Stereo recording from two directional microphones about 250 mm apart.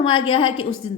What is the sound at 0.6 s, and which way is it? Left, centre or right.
Speech, left.